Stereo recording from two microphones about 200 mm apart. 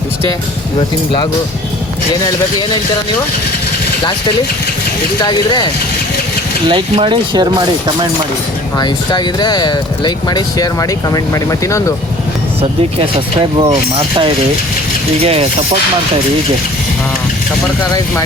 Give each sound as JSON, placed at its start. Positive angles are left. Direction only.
{"t": 0.8, "sound": "speech", "side_deg": 25}
{"t": 5.2, "sound": "speech", "side_deg": 20}
{"t": 6.7, "sound": "speech", "side_deg": -25}
{"t": 8.8, "sound": "speech", "side_deg": 20}
{"t": 13.6, "sound": "speech", "side_deg": -25}